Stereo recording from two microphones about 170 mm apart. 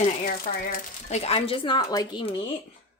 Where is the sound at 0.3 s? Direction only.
55° left (ahead or behind).